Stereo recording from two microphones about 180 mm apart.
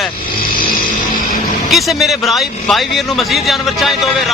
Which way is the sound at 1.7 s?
Centre (ahead or behind).